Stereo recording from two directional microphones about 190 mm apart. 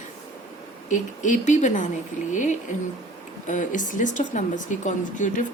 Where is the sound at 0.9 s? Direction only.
40° left (ahead or behind).